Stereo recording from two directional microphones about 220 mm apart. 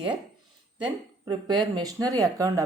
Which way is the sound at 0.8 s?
20° right (ahead or behind).